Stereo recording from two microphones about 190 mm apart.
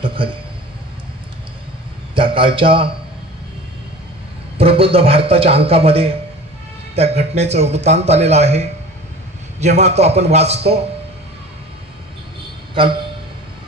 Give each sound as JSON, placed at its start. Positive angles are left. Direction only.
{"t": 0.0, "sound": "a sound", "side_deg": -25}
{"t": 2.1, "sound": "a man's voice", "side_deg": -25}
{"t": 4.6, "sound": "a man's voice", "side_deg": -30}